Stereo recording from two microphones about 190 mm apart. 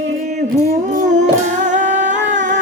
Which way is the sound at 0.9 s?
40° right (ahead or behind).